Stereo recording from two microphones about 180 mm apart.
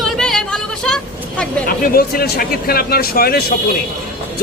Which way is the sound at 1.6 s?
55° left (ahead or behind).